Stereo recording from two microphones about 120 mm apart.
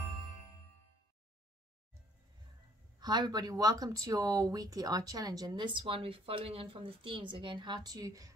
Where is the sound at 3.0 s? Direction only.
35° right (ahead or behind).